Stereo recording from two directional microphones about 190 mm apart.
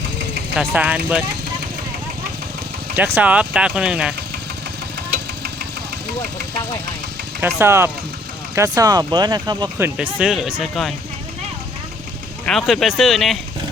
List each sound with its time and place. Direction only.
0.5 s speech: 5° right (ahead or behind)
2.9 s speech: 10° right (ahead or behind)
7.4 s speech: 10° right (ahead or behind)
12.5 s speech: centre (ahead or behind)